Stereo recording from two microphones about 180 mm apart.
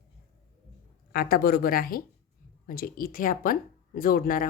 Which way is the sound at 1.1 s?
55° left (ahead or behind).